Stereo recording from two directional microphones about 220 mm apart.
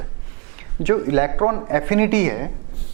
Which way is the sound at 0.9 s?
15° right (ahead or behind).